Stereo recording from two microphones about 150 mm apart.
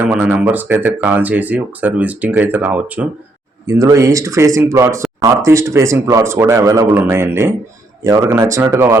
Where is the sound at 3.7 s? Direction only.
20° right (ahead or behind).